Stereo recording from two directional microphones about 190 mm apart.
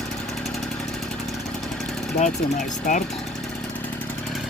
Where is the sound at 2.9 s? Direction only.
45° left (ahead or behind).